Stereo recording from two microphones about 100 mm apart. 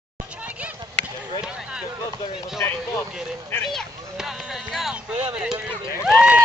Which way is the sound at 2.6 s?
25° left (ahead or behind).